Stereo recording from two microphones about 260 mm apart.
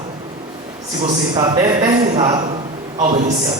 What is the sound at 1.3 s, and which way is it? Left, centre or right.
Speech, centre.